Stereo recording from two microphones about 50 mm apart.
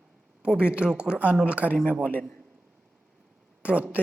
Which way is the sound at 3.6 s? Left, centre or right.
Right.